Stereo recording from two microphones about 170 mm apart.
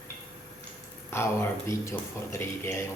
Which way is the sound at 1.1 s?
15° left (ahead or behind).